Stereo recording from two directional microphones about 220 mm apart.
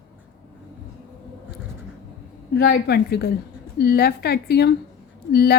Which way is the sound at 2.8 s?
45° left (ahead or behind).